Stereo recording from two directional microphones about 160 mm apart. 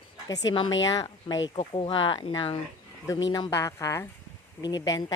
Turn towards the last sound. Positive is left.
turn(degrees=25)  # may be behind; listen again after turning